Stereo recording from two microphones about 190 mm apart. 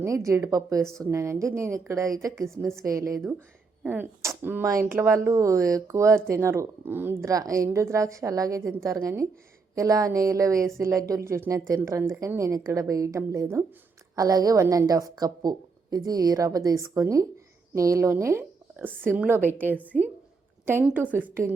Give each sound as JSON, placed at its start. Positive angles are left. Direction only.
{"t": 0.0, "sound": "a woman's voice", "side_deg": -15}